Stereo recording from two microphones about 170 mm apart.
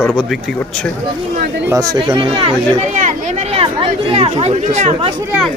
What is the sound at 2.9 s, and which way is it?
Chatter, 50° right (ahead or behind).